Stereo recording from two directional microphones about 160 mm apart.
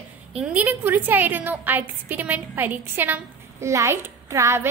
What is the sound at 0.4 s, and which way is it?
A woman's voice, 10° right (ahead or behind).